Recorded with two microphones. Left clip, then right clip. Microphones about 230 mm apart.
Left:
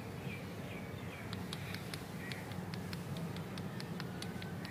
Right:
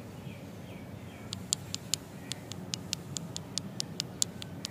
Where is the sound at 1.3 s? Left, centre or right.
Right.